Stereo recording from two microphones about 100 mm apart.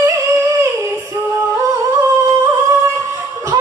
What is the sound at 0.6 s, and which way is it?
Music, 30° right (ahead or behind).